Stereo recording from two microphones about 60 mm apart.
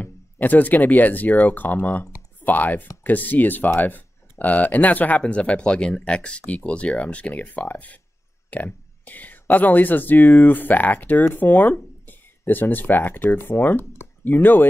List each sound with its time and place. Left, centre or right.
0.0 s speech: left